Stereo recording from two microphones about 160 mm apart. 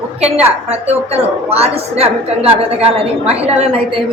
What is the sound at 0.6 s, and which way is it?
A woman's voice, 40° right (ahead or behind).